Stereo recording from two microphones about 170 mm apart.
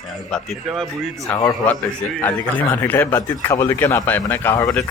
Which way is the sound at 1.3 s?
20° left (ahead or behind).